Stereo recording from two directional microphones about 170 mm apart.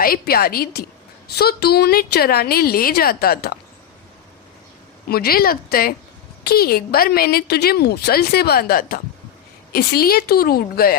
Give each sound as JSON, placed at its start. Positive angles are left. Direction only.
{"t": 0.0, "sound": "a woman's voice", "side_deg": 60}
{"t": 5.0, "sound": "a woman's voice", "side_deg": 65}